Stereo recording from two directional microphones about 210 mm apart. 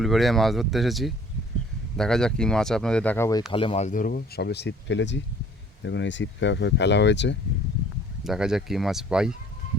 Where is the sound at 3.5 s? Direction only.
25° left (ahead or behind); by 7.3 s 55° left (ahead or behind).